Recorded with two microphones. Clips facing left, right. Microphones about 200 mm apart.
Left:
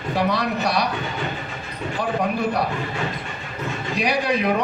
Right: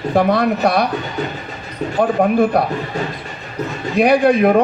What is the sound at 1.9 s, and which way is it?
Speech, 50° right (ahead or behind).